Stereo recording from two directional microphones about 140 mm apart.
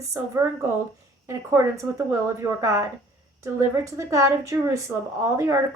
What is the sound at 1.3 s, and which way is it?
A woman's voice, 20° right (ahead or behind).